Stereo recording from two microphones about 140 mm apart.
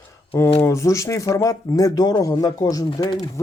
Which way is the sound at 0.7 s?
20° left (ahead or behind).